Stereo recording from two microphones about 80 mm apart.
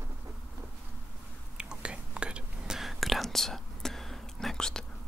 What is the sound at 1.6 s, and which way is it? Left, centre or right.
Whispering, centre.